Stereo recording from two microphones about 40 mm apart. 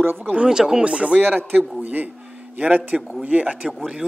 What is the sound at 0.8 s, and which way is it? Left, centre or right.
Speech, right.